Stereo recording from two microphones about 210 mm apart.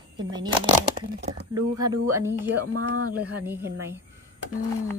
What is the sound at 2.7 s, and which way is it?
Speech, 90° right.